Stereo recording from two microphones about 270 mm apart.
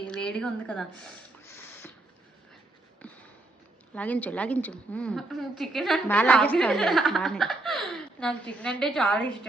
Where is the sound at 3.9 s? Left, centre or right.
Centre.